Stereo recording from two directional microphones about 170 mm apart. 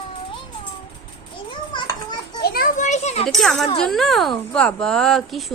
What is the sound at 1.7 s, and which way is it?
Children playing, 25° left (ahead or behind).